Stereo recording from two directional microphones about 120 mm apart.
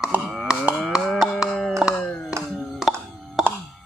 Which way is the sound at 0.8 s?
10° right (ahead or behind).